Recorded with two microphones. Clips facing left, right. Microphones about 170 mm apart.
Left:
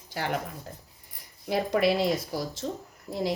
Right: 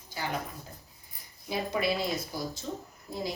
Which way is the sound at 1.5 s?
85° left.